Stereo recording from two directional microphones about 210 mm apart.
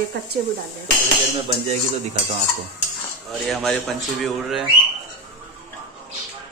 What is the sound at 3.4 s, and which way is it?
A man's voice, centre (ahead or behind).